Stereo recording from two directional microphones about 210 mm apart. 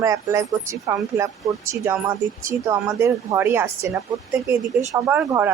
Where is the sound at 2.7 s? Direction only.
10° right (ahead or behind).